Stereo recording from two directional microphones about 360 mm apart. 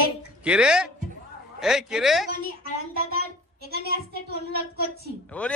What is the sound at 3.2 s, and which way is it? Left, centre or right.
A child's voice, right.